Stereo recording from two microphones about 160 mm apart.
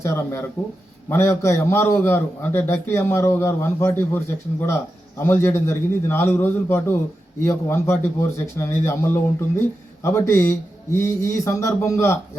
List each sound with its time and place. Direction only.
0.0 s a man's voice: 15° left (ahead or behind)